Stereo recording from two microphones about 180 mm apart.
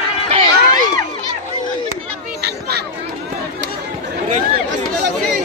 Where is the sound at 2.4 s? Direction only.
60° right (ahead or behind).